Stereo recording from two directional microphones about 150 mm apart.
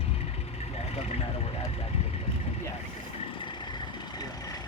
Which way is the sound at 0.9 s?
45° left (ahead or behind).